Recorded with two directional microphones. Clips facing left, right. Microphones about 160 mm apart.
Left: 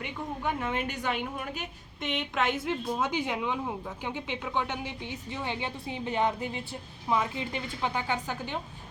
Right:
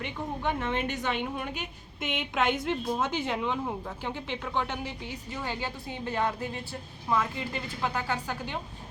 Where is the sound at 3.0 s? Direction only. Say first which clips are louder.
Even; 15° left (ahead or behind).